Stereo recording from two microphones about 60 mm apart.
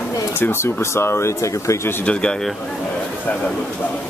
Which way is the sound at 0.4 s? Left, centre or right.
Left.